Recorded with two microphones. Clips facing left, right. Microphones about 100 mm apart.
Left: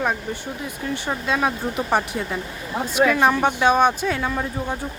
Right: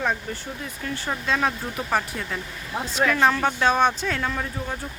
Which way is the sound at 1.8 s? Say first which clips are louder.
Left 4 dB; 20° left (ahead or behind).